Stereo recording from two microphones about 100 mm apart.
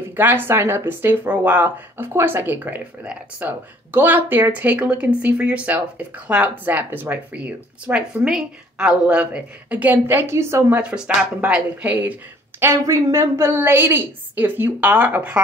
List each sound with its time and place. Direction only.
0.1 s speech: 20° right (ahead or behind)
11.4 s a woman's voice: 15° right (ahead or behind)